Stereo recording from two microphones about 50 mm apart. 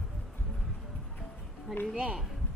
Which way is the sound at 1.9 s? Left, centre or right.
Centre.